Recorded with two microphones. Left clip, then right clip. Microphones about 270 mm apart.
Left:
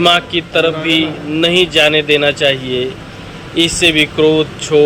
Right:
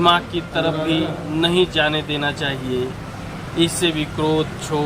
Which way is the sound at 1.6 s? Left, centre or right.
Left.